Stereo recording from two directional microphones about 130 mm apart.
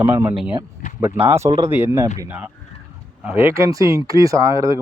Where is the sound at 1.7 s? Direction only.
15° right (ahead or behind).